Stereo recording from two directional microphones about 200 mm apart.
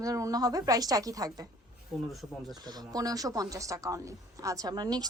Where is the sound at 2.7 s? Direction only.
20° right (ahead or behind).